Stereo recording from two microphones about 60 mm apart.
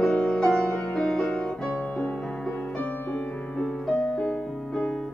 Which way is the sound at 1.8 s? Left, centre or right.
Left.